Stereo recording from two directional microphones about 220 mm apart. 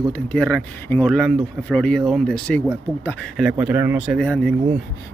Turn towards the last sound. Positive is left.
turn(degrees=5)  # may be behind; listen again after turning